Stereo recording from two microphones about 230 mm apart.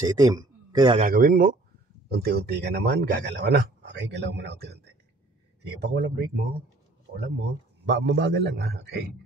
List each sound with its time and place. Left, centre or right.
0.0 s a man's voice: centre
1.0 s speech: right
7.8 s speech: right